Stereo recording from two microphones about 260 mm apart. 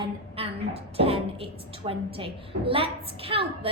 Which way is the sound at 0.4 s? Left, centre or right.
Right.